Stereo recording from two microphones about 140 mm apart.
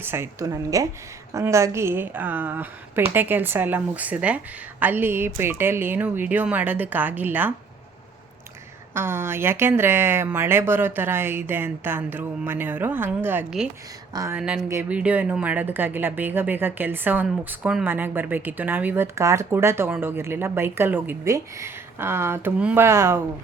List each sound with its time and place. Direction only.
0.0 s a woman's voice: 15° right (ahead or behind)
9.0 s speech: 15° right (ahead or behind)
14.1 s speech: 25° right (ahead or behind)
14.3 s speech: 10° right (ahead or behind)
17.8 s speech: 15° right (ahead or behind)